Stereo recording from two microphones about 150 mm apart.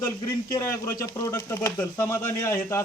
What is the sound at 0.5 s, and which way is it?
Speech, 20° left (ahead or behind).